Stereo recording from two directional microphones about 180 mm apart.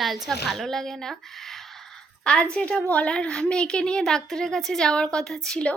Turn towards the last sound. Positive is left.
turn(degrees=5)  # may be behind; listen again after turning